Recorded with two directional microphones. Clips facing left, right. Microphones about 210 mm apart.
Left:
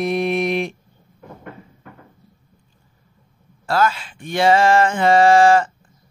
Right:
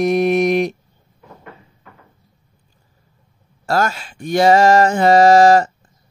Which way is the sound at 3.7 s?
45° right (ahead or behind).